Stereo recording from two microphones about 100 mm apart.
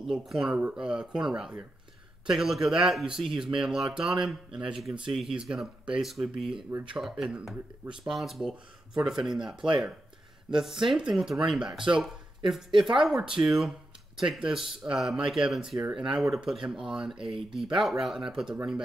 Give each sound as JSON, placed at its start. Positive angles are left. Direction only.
{"t": 0.0, "sound": "speech", "side_deg": 0}
{"t": 10.9, "sound": "speech", "side_deg": -5}
{"t": 17.2, "sound": "speech", "side_deg": -60}
{"t": 17.7, "sound": "speech", "side_deg": 0}